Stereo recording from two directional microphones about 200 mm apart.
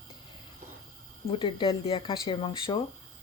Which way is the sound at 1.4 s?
25° left (ahead or behind).